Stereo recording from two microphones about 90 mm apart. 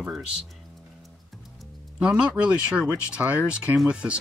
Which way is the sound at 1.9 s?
15° right (ahead or behind).